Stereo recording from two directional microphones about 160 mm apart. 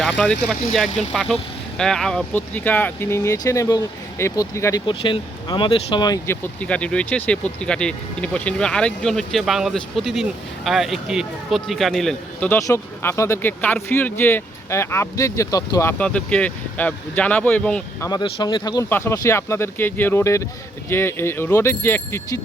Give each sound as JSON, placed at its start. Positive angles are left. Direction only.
{"t": 0.0, "sound": "speech", "side_deg": 5}
{"t": 4.9, "sound": "speech", "side_deg": 30}
{"t": 6.2, "sound": "speech", "side_deg": 15}
{"t": 12.5, "sound": "speech", "side_deg": 20}
{"t": 18.0, "sound": "speech", "side_deg": 25}
{"t": 18.9, "sound": "speech", "side_deg": 15}